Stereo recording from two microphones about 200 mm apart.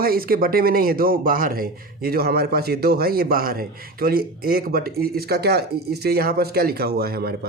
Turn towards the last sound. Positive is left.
turn(degrees=-50)  # may be behind; listen again after turning